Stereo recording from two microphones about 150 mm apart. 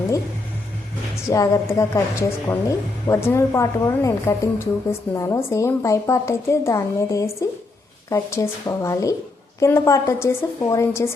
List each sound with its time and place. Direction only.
1.3 s speech: 20° left (ahead or behind)